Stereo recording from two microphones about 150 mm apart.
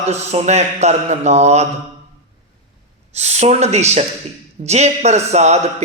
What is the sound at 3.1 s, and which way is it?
A man's voice, 45° right (ahead or behind).